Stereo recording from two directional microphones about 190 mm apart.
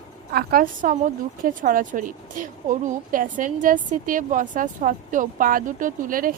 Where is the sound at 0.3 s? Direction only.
50° right (ahead or behind).